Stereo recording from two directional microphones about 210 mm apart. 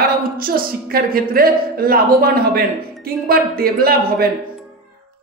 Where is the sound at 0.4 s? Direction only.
45° right (ahead or behind).